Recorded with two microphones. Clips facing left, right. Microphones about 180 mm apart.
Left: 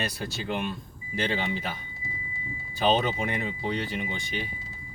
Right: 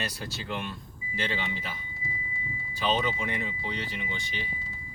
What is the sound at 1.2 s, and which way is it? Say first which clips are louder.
Speech: left 5 dB; 50° left (ahead or behind).